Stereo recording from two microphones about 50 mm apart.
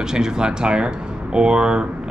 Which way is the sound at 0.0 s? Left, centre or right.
Centre.